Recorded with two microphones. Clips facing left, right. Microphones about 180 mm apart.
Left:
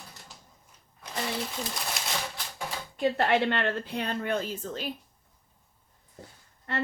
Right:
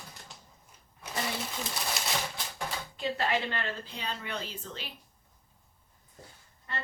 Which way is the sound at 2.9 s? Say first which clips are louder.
Left 7 dB; 55° left (ahead or behind).